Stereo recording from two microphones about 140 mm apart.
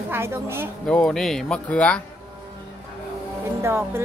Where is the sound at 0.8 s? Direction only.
5° left (ahead or behind).